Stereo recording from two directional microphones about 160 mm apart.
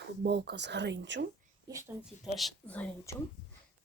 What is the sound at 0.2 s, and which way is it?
Speech, 90° right.